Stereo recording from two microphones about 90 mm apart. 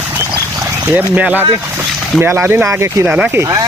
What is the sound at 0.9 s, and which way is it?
Speech, 15° right (ahead or behind).